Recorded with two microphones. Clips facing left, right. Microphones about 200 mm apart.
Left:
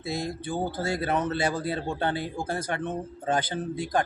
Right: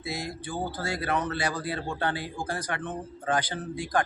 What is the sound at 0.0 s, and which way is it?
A man's voice, 25° left (ahead or behind).